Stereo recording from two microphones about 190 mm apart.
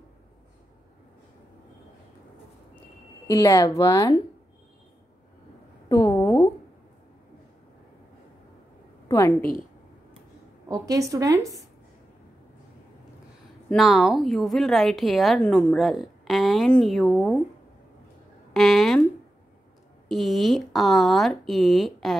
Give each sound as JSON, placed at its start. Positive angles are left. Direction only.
{"t": 3.3, "sound": "speech", "side_deg": 15}
{"t": 5.9, "sound": "a sound", "side_deg": 20}
{"t": 9.1, "sound": "a woman's voice", "side_deg": 15}
{"t": 10.7, "sound": "a woman's voice", "side_deg": -20}
{"t": 13.7, "sound": "a woman's voice", "side_deg": 0}
{"t": 18.5, "sound": "a woman's voice", "side_deg": 0}
{"t": 20.1, "sound": "a woman's voice", "side_deg": 0}